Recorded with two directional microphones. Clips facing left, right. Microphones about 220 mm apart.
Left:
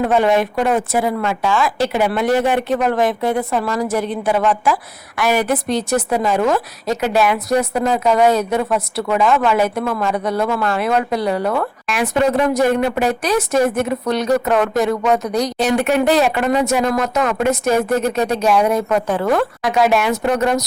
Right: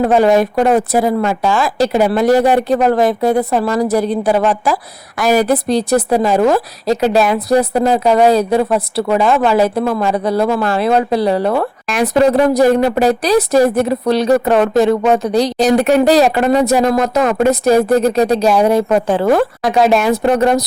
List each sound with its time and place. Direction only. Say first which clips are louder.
0.0 s a woman's voice: right 4 dB; 40° right (ahead or behind)